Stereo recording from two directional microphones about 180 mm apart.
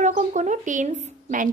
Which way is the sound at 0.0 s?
40° right (ahead or behind).